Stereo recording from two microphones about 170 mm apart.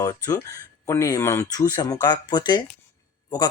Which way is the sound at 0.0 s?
20° left (ahead or behind).